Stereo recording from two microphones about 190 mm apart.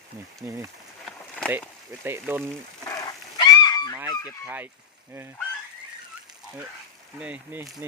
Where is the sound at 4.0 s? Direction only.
10° right (ahead or behind).